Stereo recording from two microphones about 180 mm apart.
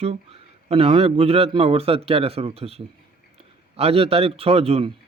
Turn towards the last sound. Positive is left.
turn(degrees=-30)  # may be behind; listen again after turning